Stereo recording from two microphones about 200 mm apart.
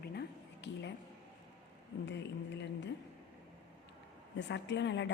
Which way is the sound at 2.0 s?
60° left (ahead or behind).